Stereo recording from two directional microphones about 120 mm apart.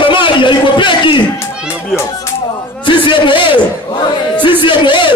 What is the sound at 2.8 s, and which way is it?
Speech, 45° left (ahead or behind).